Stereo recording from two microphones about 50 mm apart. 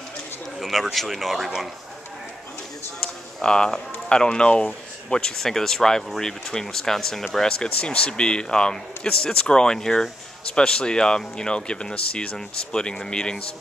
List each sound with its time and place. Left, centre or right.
0.6 s speech: centre
3.4 s speech: centre